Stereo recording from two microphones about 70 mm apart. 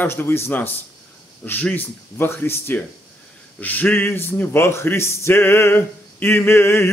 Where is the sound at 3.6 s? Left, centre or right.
Left.